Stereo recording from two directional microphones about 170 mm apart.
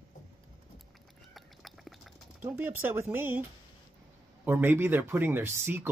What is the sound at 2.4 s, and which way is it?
Speech, 10° right (ahead or behind).